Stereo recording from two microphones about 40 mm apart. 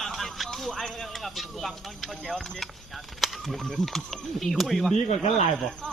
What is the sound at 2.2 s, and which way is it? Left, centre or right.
Speech, centre.